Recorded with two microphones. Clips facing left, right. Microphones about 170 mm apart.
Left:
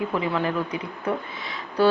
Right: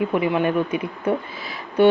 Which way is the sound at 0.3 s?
25° right (ahead or behind).